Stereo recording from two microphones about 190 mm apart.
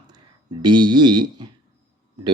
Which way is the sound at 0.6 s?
25° right (ahead or behind).